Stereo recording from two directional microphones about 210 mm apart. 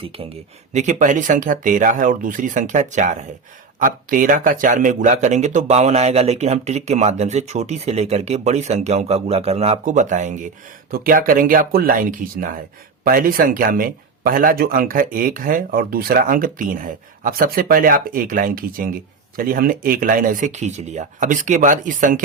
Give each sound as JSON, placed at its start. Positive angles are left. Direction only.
{"t": 0.0, "sound": "speech", "side_deg": -25}